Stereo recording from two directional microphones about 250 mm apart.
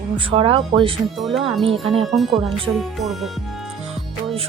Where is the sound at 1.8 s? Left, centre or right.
Right.